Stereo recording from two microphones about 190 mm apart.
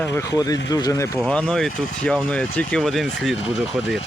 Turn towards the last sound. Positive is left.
turn(degrees=0)  # may be behind; listen again after turning